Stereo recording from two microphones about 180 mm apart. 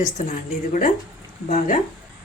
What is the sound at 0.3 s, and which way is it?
A woman's voice, 45° left (ahead or behind).